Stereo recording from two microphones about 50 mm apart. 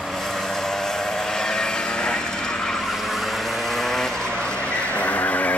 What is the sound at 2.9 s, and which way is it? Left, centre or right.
Vehicle, centre.